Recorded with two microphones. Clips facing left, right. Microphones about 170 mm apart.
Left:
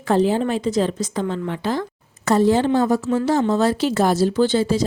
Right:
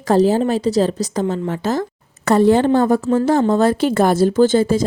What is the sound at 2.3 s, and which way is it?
A woman's voice, 60° right (ahead or behind).